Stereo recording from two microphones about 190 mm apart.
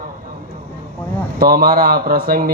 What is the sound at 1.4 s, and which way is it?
A man's voice, 50° right (ahead or behind).